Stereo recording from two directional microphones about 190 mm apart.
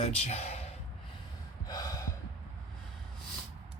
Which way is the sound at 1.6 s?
20° left (ahead or behind).